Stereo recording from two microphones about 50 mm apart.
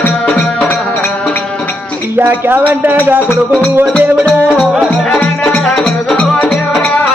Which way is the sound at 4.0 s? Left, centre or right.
Right.